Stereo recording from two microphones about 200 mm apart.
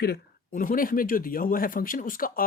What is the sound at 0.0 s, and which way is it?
Speech, 45° left (ahead or behind).